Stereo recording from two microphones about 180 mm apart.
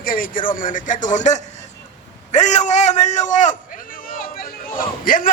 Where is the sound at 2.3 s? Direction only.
40° left (ahead or behind).